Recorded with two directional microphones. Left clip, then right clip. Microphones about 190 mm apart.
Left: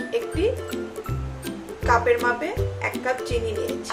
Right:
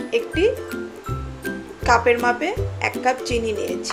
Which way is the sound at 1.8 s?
35° right (ahead or behind).